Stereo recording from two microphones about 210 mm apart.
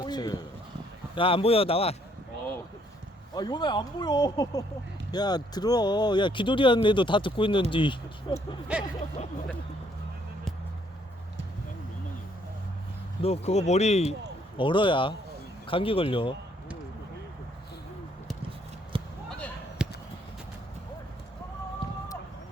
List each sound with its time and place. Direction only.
0.0 s a sound: 20° left (ahead or behind)
1.1 s speech: 25° left (ahead or behind)
3.3 s speech: 20° left (ahead or behind)
13.2 s speech: 30° left (ahead or behind)
18.9 s a sound: 25° right (ahead or behind)
19.8 s horse: 5° right (ahead or behind)